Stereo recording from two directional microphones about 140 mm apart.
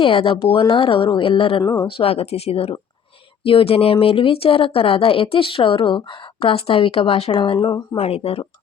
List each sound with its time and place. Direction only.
0.0 s speech: 40° left (ahead or behind)